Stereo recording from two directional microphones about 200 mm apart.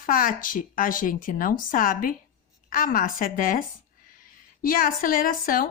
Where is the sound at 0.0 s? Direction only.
45° left (ahead or behind).